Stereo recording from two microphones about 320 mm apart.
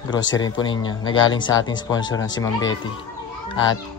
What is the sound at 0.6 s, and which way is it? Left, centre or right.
Speech, centre.